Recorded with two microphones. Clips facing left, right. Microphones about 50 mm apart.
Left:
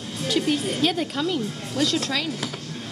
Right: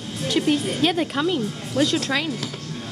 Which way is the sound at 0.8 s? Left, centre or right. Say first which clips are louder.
Right 3 dB; right.